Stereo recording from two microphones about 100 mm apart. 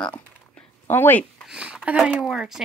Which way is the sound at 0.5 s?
20° left (ahead or behind).